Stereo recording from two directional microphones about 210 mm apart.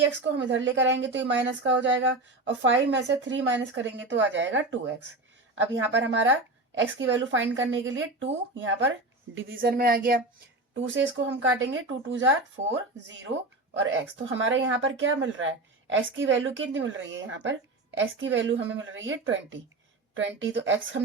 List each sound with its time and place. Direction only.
0.0 s speech: 60° right (ahead or behind)
9.6 s speech: 45° right (ahead or behind)
10.9 s speech: 60° right (ahead or behind)